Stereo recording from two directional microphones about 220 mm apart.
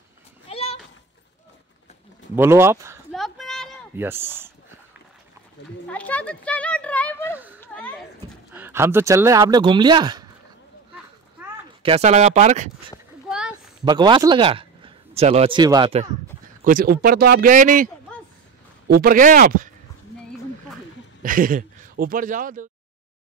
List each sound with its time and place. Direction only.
0.5 s a sound: 25° left (ahead or behind)
2.3 s speech: 10° right (ahead or behind)
3.1 s a sound: centre (ahead or behind)
3.9 s speech: 10° right (ahead or behind)
5.9 s a sound: 5° left (ahead or behind)
8.5 s speech: 10° right (ahead or behind)
11.8 s speech: 30° right (ahead or behind)
13.3 s a sound: 5° right (ahead or behind)
13.8 s a man's voice: 20° right (ahead or behind)
16.6 s speech: 40° right (ahead or behind)
18.9 s speech: 40° right (ahead or behind)
21.2 s speech: 40° right (ahead or behind)